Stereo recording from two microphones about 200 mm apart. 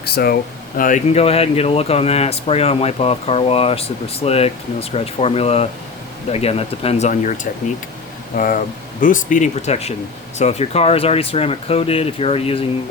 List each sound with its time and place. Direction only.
0.0 s a sound: 50° left (ahead or behind)
0.8 s speech: 40° left (ahead or behind)
8.4 s speech: 40° left (ahead or behind)